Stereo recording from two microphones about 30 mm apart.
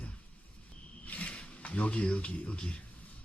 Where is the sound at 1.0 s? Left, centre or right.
Left.